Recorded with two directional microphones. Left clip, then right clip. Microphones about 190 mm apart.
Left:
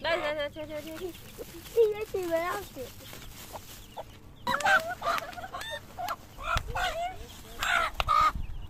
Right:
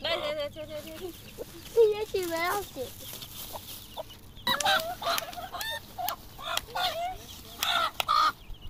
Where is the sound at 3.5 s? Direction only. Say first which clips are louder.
Right 1 dB; 5° left (ahead or behind).